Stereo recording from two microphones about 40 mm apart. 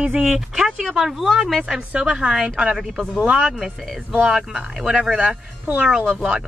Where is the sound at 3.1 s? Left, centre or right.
Right.